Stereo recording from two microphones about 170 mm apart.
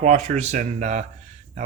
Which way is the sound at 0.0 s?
45° right (ahead or behind).